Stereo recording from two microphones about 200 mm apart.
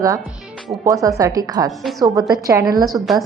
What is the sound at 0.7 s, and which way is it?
A woman's voice, 20° right (ahead or behind).